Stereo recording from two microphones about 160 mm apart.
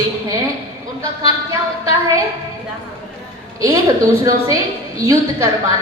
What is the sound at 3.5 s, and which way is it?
A woman's voice, 20° right (ahead or behind).